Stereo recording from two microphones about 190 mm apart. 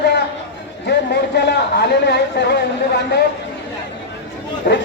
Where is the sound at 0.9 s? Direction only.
60° left (ahead or behind).